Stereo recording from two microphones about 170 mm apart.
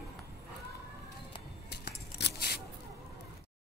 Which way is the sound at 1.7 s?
75° left (ahead or behind).